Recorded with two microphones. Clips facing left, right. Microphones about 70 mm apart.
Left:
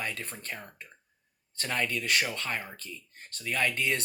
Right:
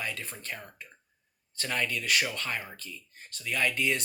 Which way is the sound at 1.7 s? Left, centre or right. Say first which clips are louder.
Even; left.